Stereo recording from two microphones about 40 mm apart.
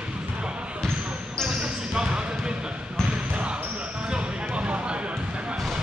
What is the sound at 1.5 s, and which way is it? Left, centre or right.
Basketball bounce, centre.